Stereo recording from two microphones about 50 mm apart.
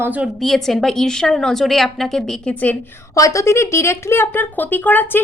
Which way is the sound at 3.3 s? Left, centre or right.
Left.